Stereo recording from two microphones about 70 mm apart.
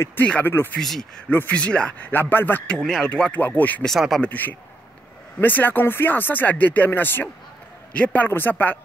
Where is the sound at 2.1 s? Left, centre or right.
Left.